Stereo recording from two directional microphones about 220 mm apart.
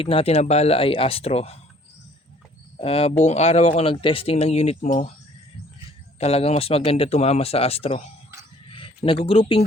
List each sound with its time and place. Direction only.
0.0 s speech: 25° left (ahead or behind)
2.8 s speech: 25° left (ahead or behind)
6.1 s speech: 25° left (ahead or behind)